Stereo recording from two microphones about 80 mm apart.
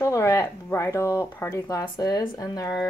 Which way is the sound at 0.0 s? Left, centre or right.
Left.